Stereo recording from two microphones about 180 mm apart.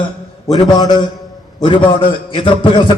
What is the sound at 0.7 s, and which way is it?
A man's voice, 25° left (ahead or behind).